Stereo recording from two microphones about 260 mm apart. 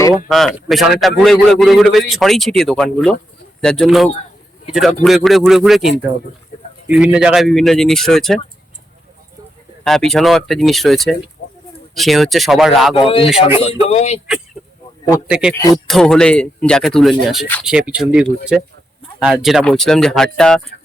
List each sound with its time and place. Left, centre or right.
0.3 s a man's voice: centre
9.8 s a man's voice: centre
13.0 s a man's voice: left
15.3 s a man's voice: centre